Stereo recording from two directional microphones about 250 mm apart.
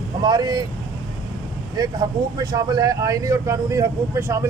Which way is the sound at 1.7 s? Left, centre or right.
Centre.